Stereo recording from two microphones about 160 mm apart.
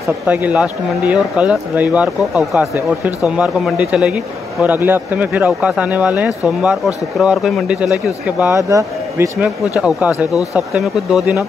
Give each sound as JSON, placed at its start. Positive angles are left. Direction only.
{"t": 0.3, "sound": "speech", "side_deg": -10}
{"t": 8.5, "sound": "a man's voice", "side_deg": -20}
{"t": 9.4, "sound": "speech", "side_deg": -5}